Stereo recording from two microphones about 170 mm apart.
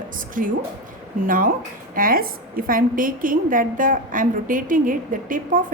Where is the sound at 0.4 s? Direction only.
50° right (ahead or behind).